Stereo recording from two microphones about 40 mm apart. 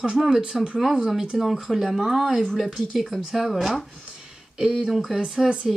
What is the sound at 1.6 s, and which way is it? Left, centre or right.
Speech, centre.